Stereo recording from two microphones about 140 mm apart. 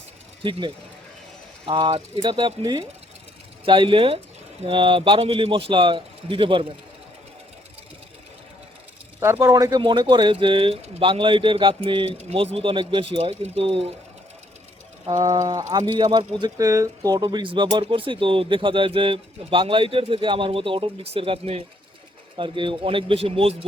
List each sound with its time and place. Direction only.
1.6 s speech: 35° right (ahead or behind)
9.2 s speech: 20° right (ahead or behind); by 13.9 s 45° right (ahead or behind)
15.1 s speech: 25° right (ahead or behind); by 23.6 s 45° right (ahead or behind)